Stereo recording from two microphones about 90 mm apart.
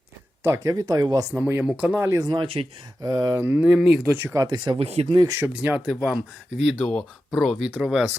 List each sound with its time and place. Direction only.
0.4 s speech: 35° right (ahead or behind)
1.4 s speech: 25° right (ahead or behind)
1.7 s speech: 10° right (ahead or behind)
2.0 s speech: 35° right (ahead or behind)
2.2 s speech: 55° right (ahead or behind)
3.0 s speech: 45° right (ahead or behind)
3.3 s speech: 25° right (ahead or behind)
4.2 s speech: 30° right (ahead or behind)
4.4 s speech: 55° right (ahead or behind); by 5.2 s 75° right (ahead or behind)
5.4 s speech: 20° right (ahead or behind)
5.9 s speech: centre (ahead or behind)